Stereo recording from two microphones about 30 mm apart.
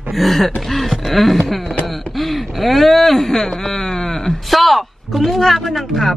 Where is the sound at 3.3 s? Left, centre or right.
Centre.